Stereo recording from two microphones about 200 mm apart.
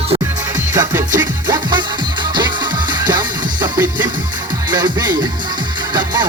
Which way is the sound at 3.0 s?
20° right (ahead or behind).